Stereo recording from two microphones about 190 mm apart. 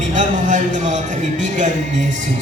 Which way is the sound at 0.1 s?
40° right (ahead or behind).